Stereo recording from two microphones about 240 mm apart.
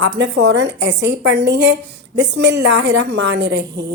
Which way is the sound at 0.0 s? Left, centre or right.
Right.